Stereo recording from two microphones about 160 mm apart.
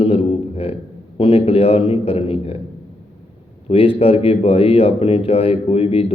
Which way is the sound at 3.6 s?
35° left (ahead or behind).